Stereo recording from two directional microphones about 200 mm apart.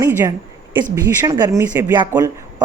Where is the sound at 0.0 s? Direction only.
15° right (ahead or behind).